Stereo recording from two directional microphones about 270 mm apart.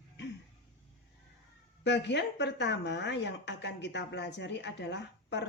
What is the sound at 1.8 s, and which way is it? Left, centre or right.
A woman's voice, left.